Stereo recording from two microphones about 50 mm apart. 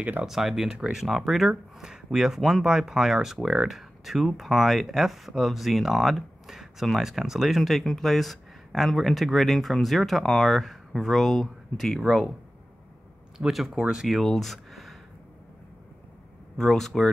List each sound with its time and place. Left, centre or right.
0.3 s speech: centre
12.0 s speech: centre
13.5 s speech: centre
16.5 s speech: centre